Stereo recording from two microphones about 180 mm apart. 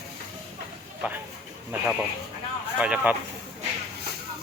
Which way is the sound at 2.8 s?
5° right (ahead or behind).